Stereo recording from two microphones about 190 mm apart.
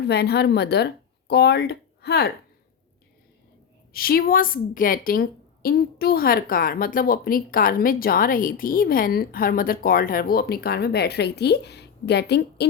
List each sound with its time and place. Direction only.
0.1 s speech: 60° left (ahead or behind)
3.9 s a woman's voice: 50° left (ahead or behind)